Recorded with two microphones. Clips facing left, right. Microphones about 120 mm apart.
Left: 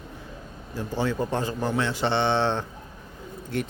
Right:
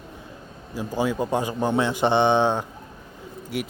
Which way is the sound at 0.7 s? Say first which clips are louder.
Right 2 dB; 15° right (ahead or behind).